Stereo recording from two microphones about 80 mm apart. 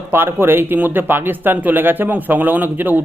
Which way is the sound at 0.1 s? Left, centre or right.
Right.